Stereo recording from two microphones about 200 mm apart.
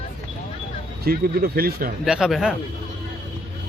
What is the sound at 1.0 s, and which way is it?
Speech, 50° right (ahead or behind).